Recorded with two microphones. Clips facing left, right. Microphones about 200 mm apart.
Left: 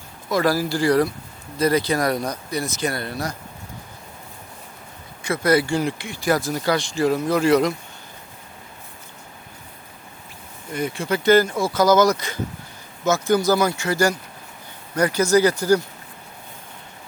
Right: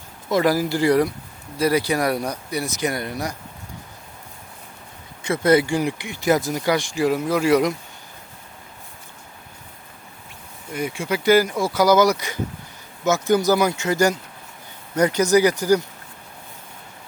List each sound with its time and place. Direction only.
0.3 s speech: 20° right (ahead or behind)
5.2 s speech: 25° right (ahead or behind); by 7.7 s 10° right (ahead or behind)
10.7 s speech: 10° right (ahead or behind)